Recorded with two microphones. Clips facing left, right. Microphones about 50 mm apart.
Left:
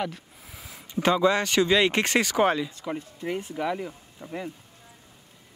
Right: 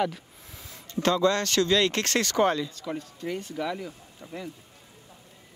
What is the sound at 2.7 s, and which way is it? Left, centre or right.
Speech, left.